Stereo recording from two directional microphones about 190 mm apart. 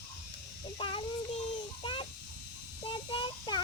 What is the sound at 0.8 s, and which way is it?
Speech, 25° left (ahead or behind).